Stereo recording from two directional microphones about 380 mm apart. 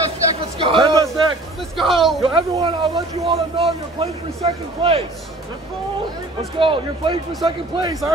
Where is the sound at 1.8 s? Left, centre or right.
Centre.